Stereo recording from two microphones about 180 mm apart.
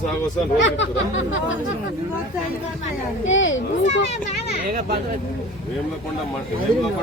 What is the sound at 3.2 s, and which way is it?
Speech, 90° left.